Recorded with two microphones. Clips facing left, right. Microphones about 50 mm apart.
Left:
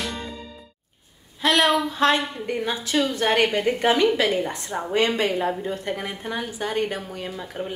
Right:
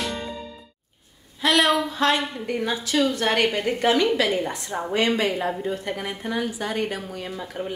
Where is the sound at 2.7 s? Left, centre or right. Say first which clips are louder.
Right 2 dB; centre.